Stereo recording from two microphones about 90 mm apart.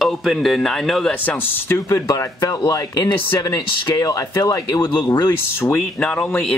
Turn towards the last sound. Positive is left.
turn(degrees=15)  # may be behind; listen again after turning